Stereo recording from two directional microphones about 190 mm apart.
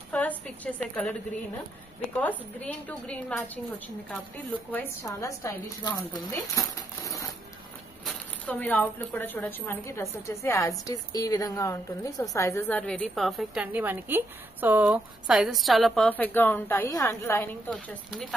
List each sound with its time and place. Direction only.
0.1 s speech: 10° left (ahead or behind)
2.1 s speech: 10° left (ahead or behind)
4.7 s speech: 15° left (ahead or behind)
8.0 s speech: 5° left (ahead or behind)